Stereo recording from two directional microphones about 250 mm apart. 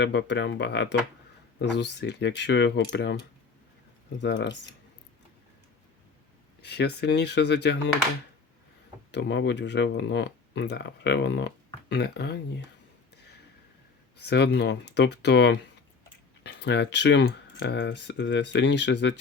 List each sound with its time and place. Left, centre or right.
0.0 s speech: left
4.2 s speech: left
6.6 s speech: left
9.1 s speech: left
14.2 s speech: left